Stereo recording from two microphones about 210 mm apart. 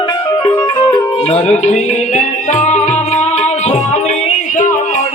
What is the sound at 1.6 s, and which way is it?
Music, 35° left (ahead or behind).